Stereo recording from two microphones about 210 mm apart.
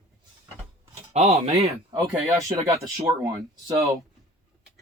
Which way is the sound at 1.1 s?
30° right (ahead or behind).